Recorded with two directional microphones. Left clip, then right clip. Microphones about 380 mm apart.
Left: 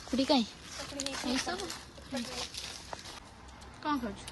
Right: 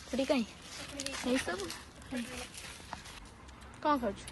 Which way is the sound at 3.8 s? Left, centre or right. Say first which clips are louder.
Right 3 dB; centre.